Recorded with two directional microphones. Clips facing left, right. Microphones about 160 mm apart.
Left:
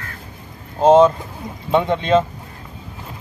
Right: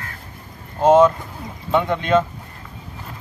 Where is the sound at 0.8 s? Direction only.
25° left (ahead or behind).